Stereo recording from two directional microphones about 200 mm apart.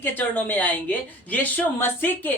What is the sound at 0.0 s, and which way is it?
Speech, 10° left (ahead or behind).